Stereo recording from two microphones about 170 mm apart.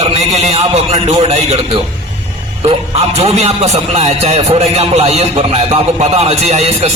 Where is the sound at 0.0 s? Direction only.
40° right (ahead or behind).